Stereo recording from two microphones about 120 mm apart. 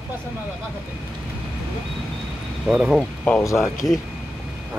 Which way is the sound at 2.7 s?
10° right (ahead or behind).